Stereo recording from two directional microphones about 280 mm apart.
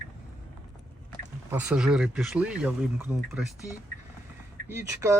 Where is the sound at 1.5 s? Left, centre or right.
Centre.